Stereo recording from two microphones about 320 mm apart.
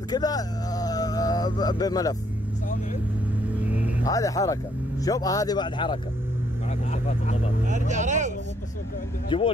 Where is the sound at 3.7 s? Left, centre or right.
Centre.